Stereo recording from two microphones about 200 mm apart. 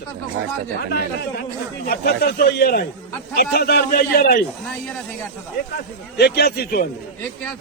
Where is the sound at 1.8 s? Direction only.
50° left (ahead or behind).